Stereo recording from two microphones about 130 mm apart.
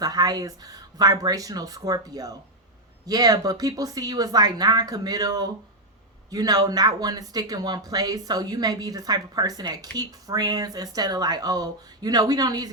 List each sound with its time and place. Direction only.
0.0 s speech: 30° right (ahead or behind)